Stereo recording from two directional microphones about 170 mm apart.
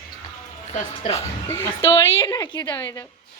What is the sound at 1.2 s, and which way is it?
A woman's voice, 15° left (ahead or behind).